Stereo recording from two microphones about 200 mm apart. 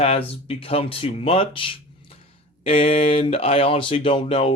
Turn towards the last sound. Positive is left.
turn(degrees=25)  # may be behind; listen again after turning